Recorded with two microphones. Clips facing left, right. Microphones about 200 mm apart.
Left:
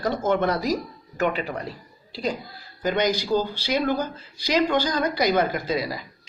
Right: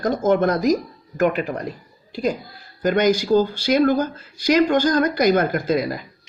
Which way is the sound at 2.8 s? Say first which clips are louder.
Right 5 dB; 50° right (ahead or behind).